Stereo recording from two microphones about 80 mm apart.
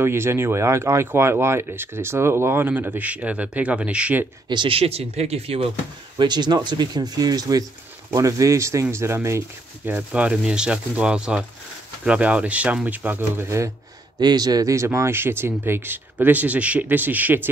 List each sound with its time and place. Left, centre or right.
0.0 s speech: right
4.5 s speech: right
6.1 s speech: right
9.8 s speech: right
10.3 s speech: centre; by 13.7 s right
14.2 s a man's voice: right
14.9 s speech: right